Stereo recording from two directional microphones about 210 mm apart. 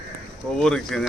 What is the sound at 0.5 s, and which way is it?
Speech, 5° left (ahead or behind).